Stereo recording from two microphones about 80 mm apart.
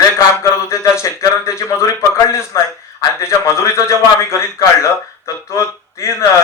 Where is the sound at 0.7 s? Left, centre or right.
Left.